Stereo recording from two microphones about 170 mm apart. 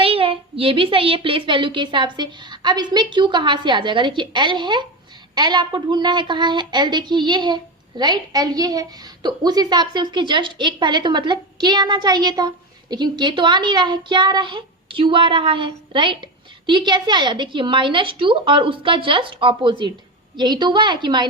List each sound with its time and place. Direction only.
0.0 s a woman's voice: 35° right (ahead or behind)